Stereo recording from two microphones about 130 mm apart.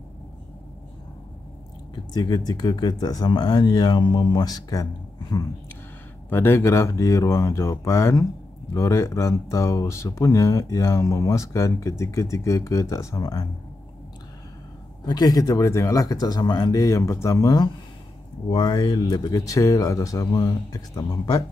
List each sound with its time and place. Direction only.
2.1 s speech: 30° left (ahead or behind)
6.3 s speech: 20° left (ahead or behind)
15.0 s speech: 30° left (ahead or behind)